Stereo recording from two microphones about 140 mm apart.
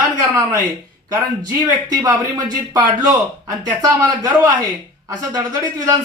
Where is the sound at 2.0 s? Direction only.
25° right (ahead or behind).